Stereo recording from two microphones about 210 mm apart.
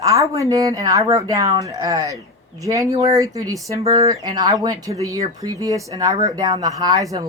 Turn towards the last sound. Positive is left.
turn(degrees=-15)  # may be behind; listen again after turning